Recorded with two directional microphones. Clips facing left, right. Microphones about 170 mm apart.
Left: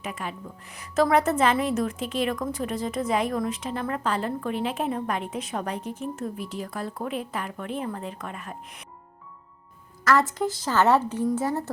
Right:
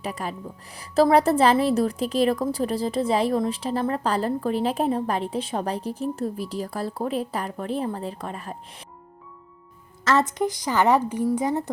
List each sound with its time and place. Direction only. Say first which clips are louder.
0.0 s a woman's voice: right 3 dB; 35° right (ahead or behind)
10.0 s a woman's voice: right 1 dB; 25° right (ahead or behind)